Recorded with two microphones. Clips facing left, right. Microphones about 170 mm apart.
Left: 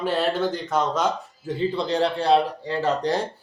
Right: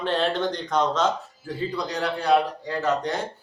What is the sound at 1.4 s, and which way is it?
Speech, 25° left (ahead or behind).